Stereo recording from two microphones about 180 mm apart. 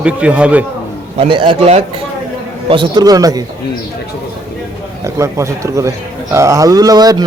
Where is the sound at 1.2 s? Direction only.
30° right (ahead or behind).